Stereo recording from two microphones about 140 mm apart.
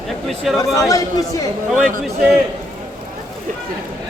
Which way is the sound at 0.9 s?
25° left (ahead or behind).